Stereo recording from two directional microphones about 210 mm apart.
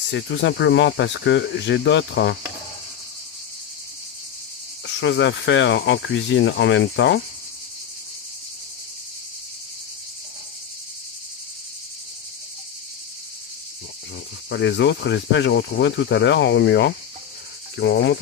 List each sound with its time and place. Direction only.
0.1 s speech: 60° left (ahead or behind)
4.8 s speech: 60° left (ahead or behind)
14.5 s speech: 55° left (ahead or behind)
17.7 s insect: 55° left (ahead or behind)